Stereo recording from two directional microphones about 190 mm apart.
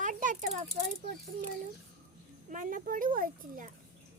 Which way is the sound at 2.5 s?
45° right (ahead or behind).